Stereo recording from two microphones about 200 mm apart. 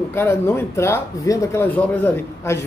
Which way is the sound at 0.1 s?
10° left (ahead or behind).